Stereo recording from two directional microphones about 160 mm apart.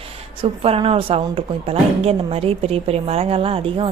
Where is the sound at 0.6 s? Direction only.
35° right (ahead or behind).